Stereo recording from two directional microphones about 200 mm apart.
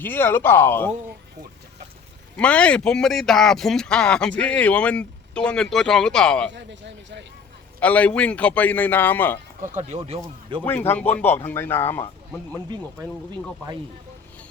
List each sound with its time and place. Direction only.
0.0 s a man's voice: 10° left (ahead or behind)
2.3 s speech: 5° left (ahead or behind)
6.5 s speech: 60° right (ahead or behind)
7.8 s a man's voice: 5° left (ahead or behind)
9.7 s speech: 35° right (ahead or behind)
10.6 s a man's voice: 10° left (ahead or behind)
12.7 s speech: 20° right (ahead or behind)